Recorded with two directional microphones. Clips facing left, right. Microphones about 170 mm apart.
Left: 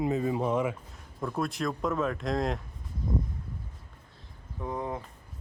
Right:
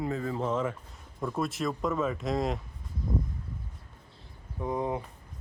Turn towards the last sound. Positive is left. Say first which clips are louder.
# right 3 dB
turn(degrees=-15)  # may be behind; listen again after turning